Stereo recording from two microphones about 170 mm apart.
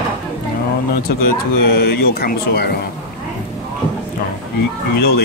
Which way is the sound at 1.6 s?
70° left (ahead or behind).